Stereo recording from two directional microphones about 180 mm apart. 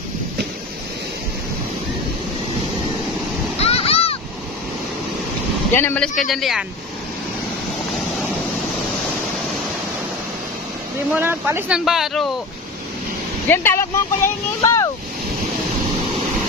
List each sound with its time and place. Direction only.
3.5 s a sound: 35° left (ahead or behind)
5.8 s speech: 10° left (ahead or behind)
11.1 s speech: 10° right (ahead or behind)
11.8 s speech: centre (ahead or behind)
13.5 s speech: 15° left (ahead or behind)